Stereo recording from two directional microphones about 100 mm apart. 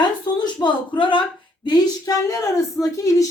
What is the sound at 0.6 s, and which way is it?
Speech, 55° left (ahead or behind).